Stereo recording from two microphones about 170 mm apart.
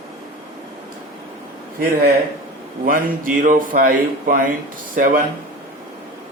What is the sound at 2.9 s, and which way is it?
Speech, 55° right (ahead or behind).